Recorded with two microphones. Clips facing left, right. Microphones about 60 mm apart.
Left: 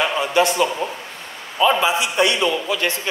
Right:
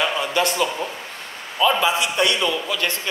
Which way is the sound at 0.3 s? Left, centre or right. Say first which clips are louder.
Left 4 dB; left.